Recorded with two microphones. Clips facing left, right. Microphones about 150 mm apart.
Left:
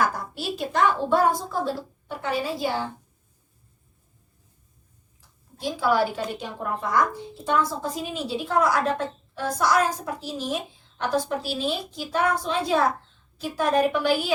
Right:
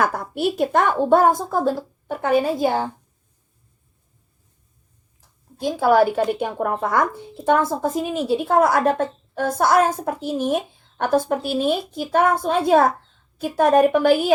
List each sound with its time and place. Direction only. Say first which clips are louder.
0.0 s speech: right 5 dB; 55° right (ahead or behind)
5.5 s speech: right 6 dB; 50° right (ahead or behind)